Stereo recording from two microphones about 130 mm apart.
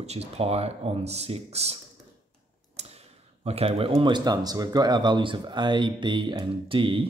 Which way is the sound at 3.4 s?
50° right (ahead or behind).